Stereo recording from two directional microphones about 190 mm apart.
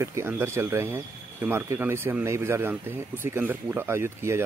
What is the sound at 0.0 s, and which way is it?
Speech, 15° right (ahead or behind).